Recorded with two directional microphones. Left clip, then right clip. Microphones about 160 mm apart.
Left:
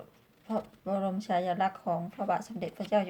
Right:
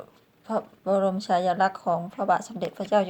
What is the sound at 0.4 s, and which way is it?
A woman's voice, 25° right (ahead or behind).